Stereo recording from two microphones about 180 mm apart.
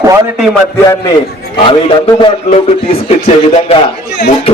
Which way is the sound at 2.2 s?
30° left (ahead or behind).